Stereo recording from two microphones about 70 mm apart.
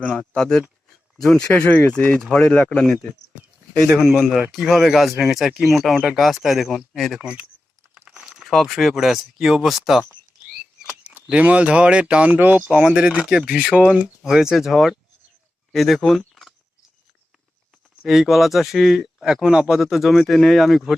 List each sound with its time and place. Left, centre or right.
0.1 s speech: centre
2.1 s speech: centre
4.1 s speech: centre
7.2 s speech: centre
8.2 s speech: centre
11.0 s speech: centre
12.7 s speech: centre
18.0 s speech: centre